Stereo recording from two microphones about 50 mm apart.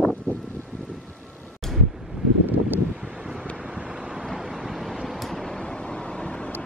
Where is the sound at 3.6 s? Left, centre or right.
Centre.